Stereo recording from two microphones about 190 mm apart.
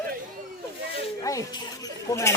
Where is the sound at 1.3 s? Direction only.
15° left (ahead or behind).